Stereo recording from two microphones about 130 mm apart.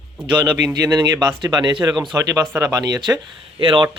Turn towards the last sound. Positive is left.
turn(degrees=-40)  # may be behind; listen again after turning